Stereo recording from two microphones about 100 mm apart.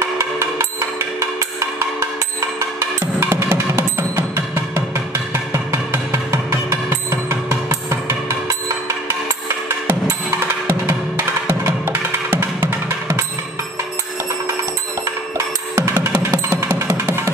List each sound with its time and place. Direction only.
0.2 s music: 30° right (ahead or behind)
2.8 s music: 25° right (ahead or behind)
10.7 s music: 20° right (ahead or behind)
15.3 s music: 25° right (ahead or behind)